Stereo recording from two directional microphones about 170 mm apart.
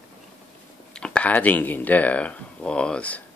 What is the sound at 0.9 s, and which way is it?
Speech, 5° left (ahead or behind).